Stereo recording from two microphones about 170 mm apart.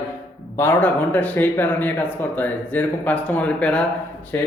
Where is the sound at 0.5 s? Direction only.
10° left (ahead or behind).